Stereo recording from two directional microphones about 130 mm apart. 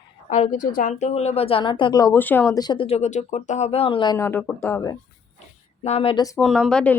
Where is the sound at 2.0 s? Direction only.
15° left (ahead or behind).